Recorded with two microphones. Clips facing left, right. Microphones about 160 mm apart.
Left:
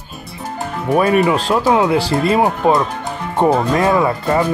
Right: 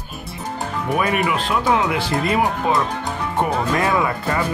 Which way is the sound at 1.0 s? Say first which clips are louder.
Left 8 dB; 35° left (ahead or behind).